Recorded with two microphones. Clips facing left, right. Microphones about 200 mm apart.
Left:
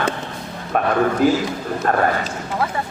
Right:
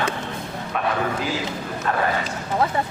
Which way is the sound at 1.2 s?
50° left (ahead or behind).